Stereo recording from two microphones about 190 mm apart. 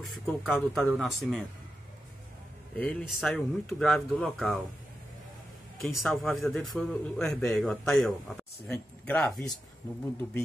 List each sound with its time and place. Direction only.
0.0 s a man's voice: 5° left (ahead or behind)
2.8 s a man's voice: 5° left (ahead or behind)
5.8 s a man's voice: centre (ahead or behind)